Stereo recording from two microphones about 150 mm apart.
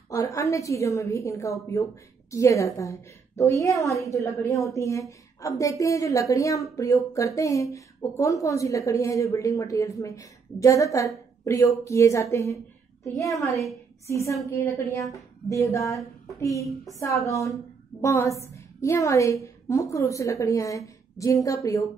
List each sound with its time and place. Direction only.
0.1 s a woman's voice: 20° left (ahead or behind)
13.5 s a woman's voice: centre (ahead or behind)
14.0 s a woman's voice: 20° left (ahead or behind)
15.9 s speech: centre (ahead or behind)
16.3 s a woman's voice: 20° left (ahead or behind)